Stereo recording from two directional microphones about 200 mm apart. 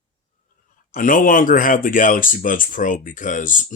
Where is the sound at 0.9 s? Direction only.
40° left (ahead or behind).